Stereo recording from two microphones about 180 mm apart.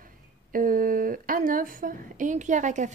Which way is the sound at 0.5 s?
50° right (ahead or behind).